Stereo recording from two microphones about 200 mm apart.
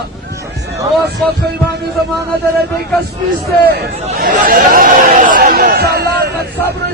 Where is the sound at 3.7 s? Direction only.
50° right (ahead or behind).